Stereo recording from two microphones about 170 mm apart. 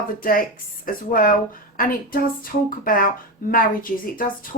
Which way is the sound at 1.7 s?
55° left (ahead or behind).